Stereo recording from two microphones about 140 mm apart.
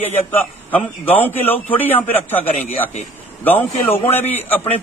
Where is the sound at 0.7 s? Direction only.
10° left (ahead or behind).